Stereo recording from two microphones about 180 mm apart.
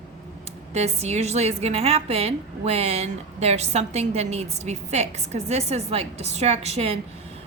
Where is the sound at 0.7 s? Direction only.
35° right (ahead or behind).